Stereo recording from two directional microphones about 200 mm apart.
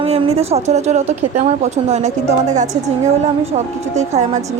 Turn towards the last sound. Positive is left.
turn(degrees=-35)  # may be behind; listen again after turning